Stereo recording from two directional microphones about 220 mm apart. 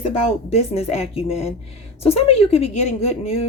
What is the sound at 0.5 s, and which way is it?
A woman's voice, 30° left (ahead or behind).